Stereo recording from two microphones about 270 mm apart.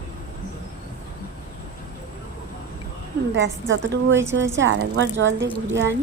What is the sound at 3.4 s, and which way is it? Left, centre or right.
A woman's voice, right.